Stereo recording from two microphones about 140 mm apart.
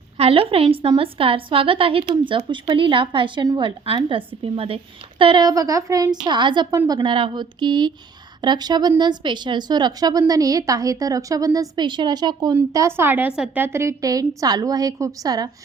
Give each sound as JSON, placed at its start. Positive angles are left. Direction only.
{"t": 0.2, "sound": "a woman's voice", "side_deg": -45}
{"t": 5.2, "sound": "a woman's voice", "side_deg": -30}
{"t": 12.5, "sound": "a woman's voice", "side_deg": -20}